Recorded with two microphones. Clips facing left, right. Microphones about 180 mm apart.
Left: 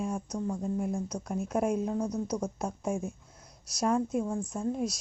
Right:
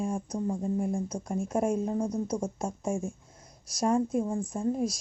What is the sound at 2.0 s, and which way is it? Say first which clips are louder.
Speech: right 2 dB; 30° right (ahead or behind).